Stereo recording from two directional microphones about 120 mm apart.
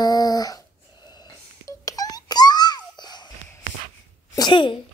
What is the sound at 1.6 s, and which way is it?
Babbling, 30° left (ahead or behind).